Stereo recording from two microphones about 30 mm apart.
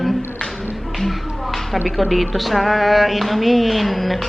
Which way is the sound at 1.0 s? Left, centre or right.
Centre.